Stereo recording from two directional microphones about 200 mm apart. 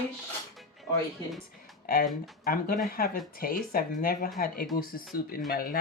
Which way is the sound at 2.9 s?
45° left (ahead or behind).